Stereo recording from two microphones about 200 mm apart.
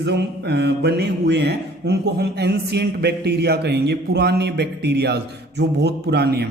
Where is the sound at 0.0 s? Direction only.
55° right (ahead or behind).